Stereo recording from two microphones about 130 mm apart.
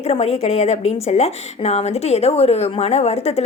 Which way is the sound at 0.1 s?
50° left (ahead or behind).